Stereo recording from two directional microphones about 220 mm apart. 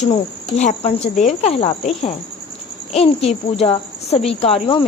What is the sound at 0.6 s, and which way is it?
A child's voice, 30° left (ahead or behind).